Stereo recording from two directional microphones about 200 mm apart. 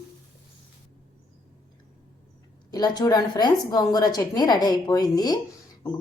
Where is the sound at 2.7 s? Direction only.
20° left (ahead or behind).